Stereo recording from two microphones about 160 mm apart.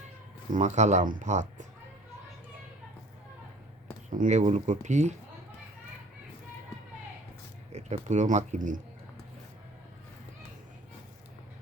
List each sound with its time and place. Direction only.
0.5 s speech: 50° right (ahead or behind)
4.1 s speech: 50° right (ahead or behind)
7.7 s speech: 45° right (ahead or behind)